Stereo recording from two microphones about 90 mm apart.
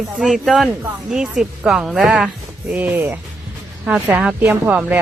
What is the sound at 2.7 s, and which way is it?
Speech, 20° right (ahead or behind).